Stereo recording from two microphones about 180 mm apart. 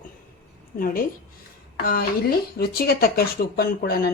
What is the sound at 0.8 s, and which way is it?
A woman's voice, 55° left (ahead or behind).